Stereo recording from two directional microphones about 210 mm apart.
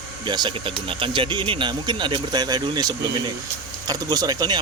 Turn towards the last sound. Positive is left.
turn(degrees=-20)  # may be behind; listen again after turning